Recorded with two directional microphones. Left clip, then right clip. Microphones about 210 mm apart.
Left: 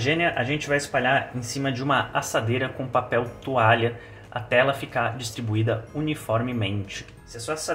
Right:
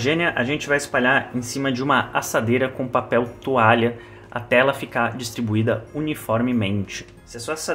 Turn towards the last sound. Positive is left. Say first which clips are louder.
# right 2 dB
turn(degrees=-40)  # may be behind; listen again after turning